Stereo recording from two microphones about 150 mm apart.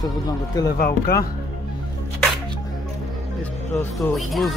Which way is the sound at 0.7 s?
90° left.